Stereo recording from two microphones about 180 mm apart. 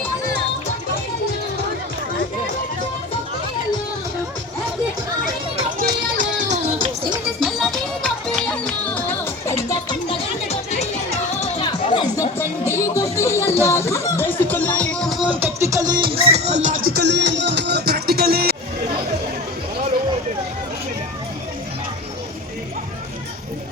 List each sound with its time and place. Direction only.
7.4 s music: centre (ahead or behind)
10.1 s music: 35° left (ahead or behind)
11.6 s music: 25° left (ahead or behind)
12.4 s music: 15° left (ahead or behind); by 16.8 s 40° right (ahead or behind)
16.9 s music: 70° right (ahead or behind)